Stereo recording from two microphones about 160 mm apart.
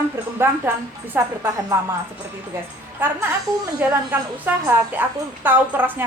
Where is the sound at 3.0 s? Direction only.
10° right (ahead or behind).